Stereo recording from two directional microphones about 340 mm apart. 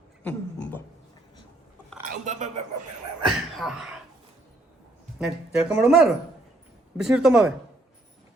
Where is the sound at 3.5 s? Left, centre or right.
Centre.